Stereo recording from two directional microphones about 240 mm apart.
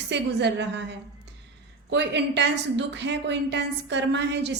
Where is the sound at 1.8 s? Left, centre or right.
Right.